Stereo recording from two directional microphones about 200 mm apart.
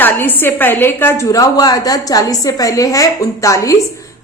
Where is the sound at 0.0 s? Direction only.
10° left (ahead or behind).